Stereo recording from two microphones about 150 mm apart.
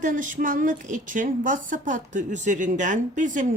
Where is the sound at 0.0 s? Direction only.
60° right (ahead or behind).